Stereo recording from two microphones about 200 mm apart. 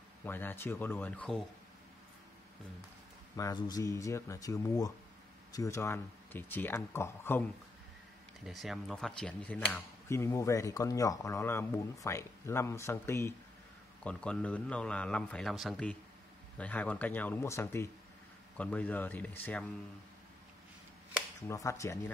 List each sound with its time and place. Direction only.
0.2 s speech: 10° left (ahead or behind)
3.3 s speech: 20° left (ahead or behind)
8.5 s speech: centre (ahead or behind)
21.5 s speech: 15° left (ahead or behind)